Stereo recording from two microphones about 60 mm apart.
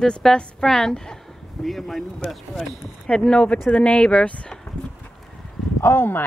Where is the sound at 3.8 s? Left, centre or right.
Centre.